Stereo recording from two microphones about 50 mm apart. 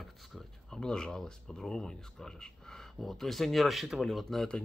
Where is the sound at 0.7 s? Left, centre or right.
Centre.